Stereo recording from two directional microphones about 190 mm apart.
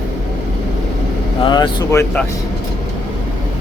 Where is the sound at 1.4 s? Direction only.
25° left (ahead or behind).